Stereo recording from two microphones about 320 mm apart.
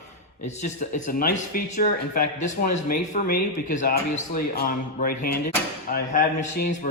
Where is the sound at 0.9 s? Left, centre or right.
Left.